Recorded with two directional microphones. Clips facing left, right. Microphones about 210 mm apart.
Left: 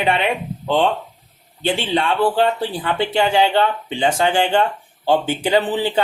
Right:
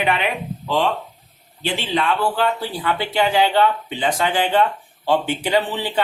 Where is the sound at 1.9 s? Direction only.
30° left (ahead or behind).